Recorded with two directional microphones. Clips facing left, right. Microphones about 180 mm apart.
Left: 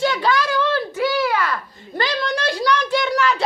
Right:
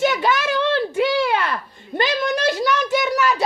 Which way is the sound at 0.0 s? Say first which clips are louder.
Even; 20° right (ahead or behind).